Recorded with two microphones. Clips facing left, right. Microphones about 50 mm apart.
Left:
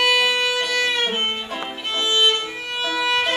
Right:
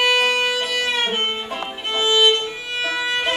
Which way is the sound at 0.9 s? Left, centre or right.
Centre.